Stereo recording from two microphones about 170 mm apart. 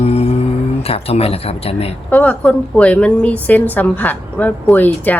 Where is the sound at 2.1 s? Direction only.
10° left (ahead or behind).